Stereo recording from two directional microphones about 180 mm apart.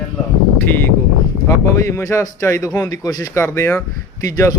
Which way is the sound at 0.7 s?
10° left (ahead or behind).